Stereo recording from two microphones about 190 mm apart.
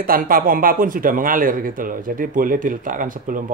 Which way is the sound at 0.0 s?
50° right (ahead or behind).